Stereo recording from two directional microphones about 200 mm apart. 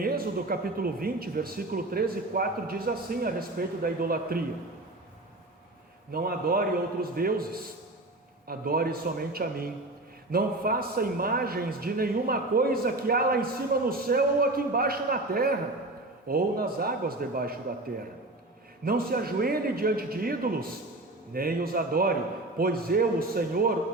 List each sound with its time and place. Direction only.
0.0 s a man's voice: 50° right (ahead or behind)
6.1 s a man's voice: 50° right (ahead or behind)
18.9 s a man's voice: 50° right (ahead or behind)